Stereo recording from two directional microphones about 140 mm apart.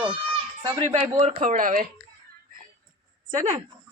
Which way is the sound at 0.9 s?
55° right (ahead or behind).